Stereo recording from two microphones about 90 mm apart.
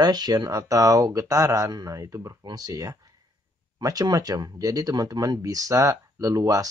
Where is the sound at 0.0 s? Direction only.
50° right (ahead or behind).